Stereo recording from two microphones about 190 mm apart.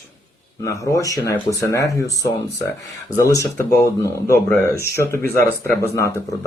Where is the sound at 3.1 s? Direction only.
15° left (ahead or behind).